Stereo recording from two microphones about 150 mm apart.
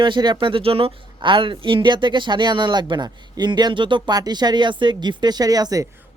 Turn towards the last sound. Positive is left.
turn(degrees=-25)  # may be behind; listen again after turning